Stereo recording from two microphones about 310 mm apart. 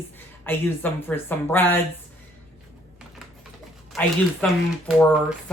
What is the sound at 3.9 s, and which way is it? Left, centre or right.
Speech, centre.